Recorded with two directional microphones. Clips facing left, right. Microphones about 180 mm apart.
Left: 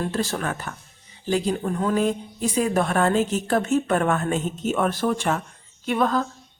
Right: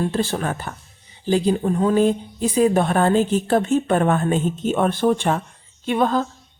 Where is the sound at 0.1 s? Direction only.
30° right (ahead or behind).